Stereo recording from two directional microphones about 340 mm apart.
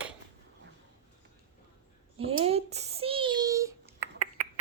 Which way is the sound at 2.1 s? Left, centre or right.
Centre.